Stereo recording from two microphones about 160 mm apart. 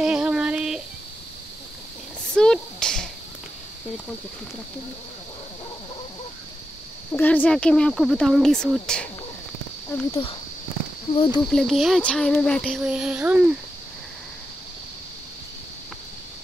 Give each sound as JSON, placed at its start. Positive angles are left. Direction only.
{"t": 0.0, "sound": "a sound", "side_deg": -5}
{"t": 2.3, "sound": "a sound", "side_deg": 5}
{"t": 7.1, "sound": "speech", "side_deg": 10}
{"t": 9.9, "sound": "speech", "side_deg": 20}
{"t": 11.4, "sound": "speech", "side_deg": 0}
{"t": 12.8, "sound": "child singing", "side_deg": -5}